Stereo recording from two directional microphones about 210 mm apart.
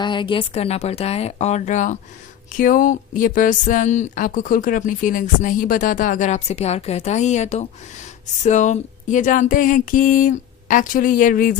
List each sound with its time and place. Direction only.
0.0 s a woman's voice: 20° left (ahead or behind); by 11.5 s 40° left (ahead or behind)